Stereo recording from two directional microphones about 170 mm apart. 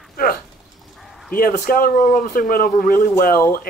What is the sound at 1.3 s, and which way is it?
Speech, 60° left (ahead or behind).